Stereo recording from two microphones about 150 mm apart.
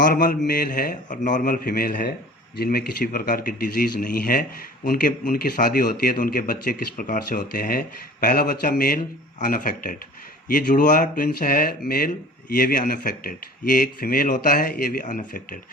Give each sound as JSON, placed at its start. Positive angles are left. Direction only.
{"t": 0.0, "sound": "a man's voice", "side_deg": 65}